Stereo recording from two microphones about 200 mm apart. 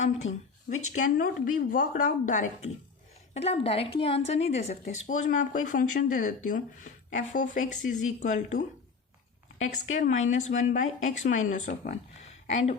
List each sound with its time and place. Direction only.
0.2 s speech: 75° left (ahead or behind)
0.9 s a woman's voice: 40° left (ahead or behind)